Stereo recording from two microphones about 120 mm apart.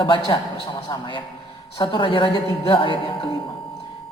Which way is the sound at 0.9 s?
40° left (ahead or behind).